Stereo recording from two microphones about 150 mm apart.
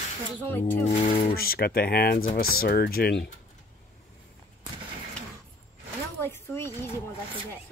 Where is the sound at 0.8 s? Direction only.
45° left (ahead or behind).